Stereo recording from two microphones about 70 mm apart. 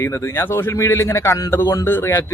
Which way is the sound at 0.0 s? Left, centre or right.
Left.